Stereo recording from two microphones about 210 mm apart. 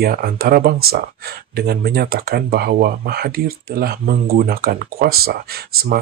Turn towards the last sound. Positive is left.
turn(degrees=-45)  # may be behind; listen again after turning